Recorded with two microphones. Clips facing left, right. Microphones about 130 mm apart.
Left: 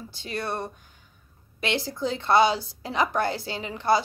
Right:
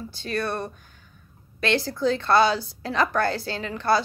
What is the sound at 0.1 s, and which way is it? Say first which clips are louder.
A woman's voice: right 3 dB; 20° left (ahead or behind).